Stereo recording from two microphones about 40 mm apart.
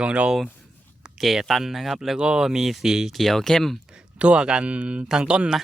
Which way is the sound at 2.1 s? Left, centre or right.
Right.